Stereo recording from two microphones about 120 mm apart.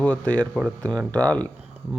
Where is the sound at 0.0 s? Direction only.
10° left (ahead or behind).